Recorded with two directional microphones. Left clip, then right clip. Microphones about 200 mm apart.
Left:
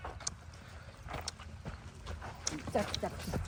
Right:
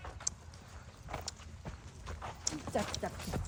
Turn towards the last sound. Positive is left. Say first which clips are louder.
# left 2 dB
turn(degrees=-5)  # may be behind; listen again after turning